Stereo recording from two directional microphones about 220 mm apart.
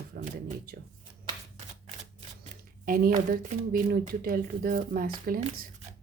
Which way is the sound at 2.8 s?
40° right (ahead or behind).